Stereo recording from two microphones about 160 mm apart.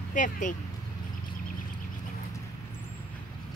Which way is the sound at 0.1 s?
55° left (ahead or behind).